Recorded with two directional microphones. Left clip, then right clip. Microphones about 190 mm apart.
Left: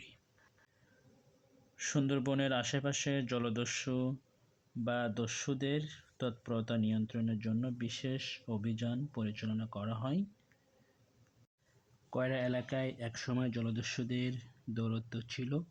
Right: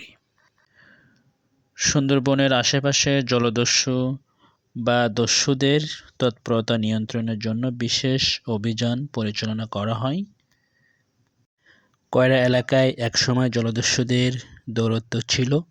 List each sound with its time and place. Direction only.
1.8 s speech: 35° right (ahead or behind)
12.1 s speech: 45° right (ahead or behind)